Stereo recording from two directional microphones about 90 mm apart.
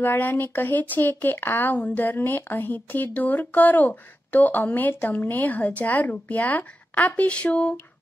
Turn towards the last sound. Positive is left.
turn(degrees=15)  # may be behind; listen again after turning